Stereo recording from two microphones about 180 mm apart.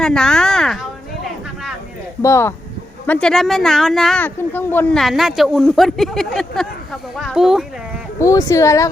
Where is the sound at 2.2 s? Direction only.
15° left (ahead or behind).